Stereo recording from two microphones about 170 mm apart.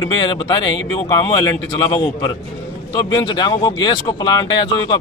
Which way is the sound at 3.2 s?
25° left (ahead or behind).